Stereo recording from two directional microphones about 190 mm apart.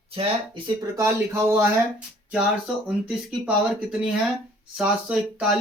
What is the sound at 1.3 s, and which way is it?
Speech, 15° right (ahead or behind).